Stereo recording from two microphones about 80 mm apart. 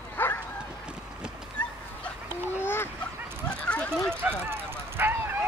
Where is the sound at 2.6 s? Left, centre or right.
Left.